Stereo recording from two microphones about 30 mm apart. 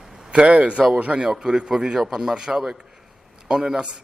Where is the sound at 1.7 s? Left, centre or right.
Centre.